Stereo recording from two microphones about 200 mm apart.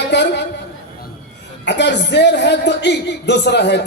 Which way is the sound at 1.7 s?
60° left (ahead or behind).